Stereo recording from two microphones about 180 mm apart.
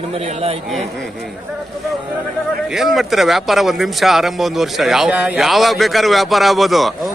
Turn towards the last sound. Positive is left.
turn(degrees=0)  # may be behind; listen again after turning